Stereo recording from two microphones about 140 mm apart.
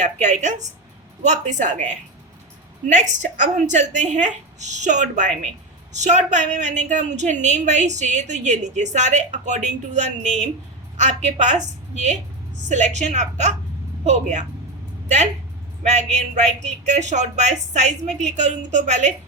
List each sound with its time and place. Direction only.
0.0 s a woman's voice: 55° right (ahead or behind)
15.8 s a woman's voice: 55° right (ahead or behind)